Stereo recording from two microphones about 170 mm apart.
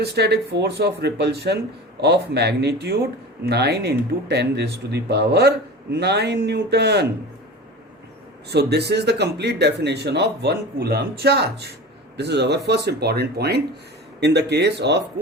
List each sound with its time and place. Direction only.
0.0 s speech: 75° right (ahead or behind)
8.4 s speech: 75° right (ahead or behind)